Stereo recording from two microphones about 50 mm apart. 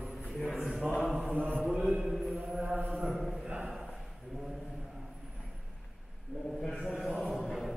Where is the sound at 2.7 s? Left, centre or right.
Right.